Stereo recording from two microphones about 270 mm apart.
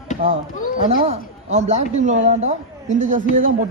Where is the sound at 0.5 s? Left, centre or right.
Left.